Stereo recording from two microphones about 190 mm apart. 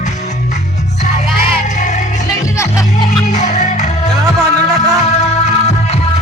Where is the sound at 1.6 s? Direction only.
40° left (ahead or behind).